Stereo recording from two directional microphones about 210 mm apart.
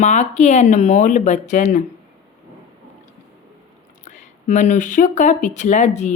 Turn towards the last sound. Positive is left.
turn(degrees=35)  # may be behind; listen again after turning